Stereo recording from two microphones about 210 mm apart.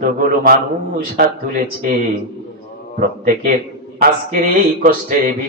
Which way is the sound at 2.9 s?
40° right (ahead or behind).